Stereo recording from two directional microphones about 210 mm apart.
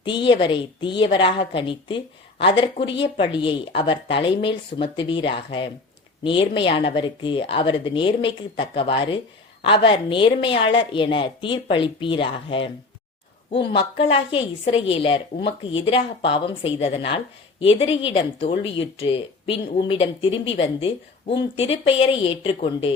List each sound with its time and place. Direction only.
0.0 s speech: 25° left (ahead or behind)